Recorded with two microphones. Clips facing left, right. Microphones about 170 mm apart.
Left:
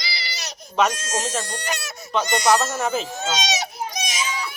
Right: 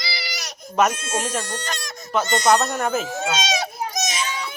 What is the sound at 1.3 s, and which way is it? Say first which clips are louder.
Speech: even; 15° left (ahead or behind).